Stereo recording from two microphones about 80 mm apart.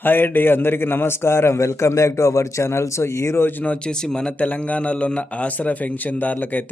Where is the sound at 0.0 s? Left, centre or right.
Left.